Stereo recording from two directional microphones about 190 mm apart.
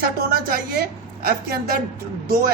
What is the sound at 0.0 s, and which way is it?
A man's voice, 50° right (ahead or behind).